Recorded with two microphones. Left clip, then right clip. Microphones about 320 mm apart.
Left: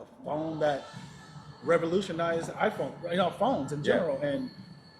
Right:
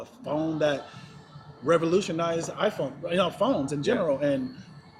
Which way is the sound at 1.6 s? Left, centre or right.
Right.